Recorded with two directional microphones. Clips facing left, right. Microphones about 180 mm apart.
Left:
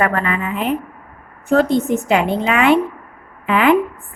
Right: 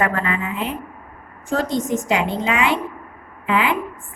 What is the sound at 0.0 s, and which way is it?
A woman's voice, 60° left (ahead or behind).